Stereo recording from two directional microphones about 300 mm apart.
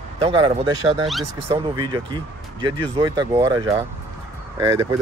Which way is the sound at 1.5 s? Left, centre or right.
Centre.